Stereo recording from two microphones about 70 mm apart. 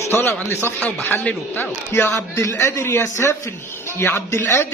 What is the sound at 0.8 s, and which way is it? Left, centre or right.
A man's voice, left.